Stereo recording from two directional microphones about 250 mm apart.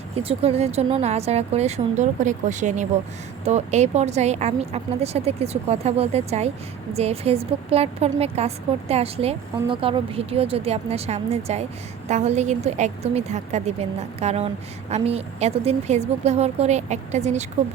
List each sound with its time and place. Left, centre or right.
0.2 s a woman's voice: right